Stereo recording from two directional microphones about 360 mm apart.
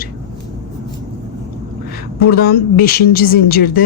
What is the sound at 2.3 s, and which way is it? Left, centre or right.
Speech, left.